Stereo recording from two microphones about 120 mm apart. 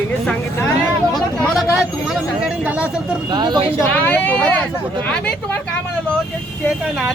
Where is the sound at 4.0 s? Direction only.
15° left (ahead or behind).